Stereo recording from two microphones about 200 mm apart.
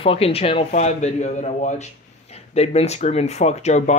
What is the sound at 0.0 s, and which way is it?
Speech, 30° left (ahead or behind).